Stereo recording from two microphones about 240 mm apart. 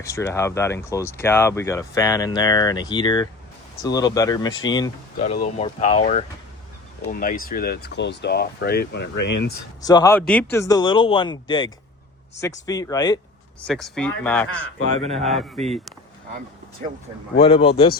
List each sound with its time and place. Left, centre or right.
0.0 s speech: centre
5.2 s speech: left
9.8 s speech: centre
13.7 s speech: centre
14.8 s speech: right
15.3 s speech: centre
16.8 s speech: right
17.4 s speech: left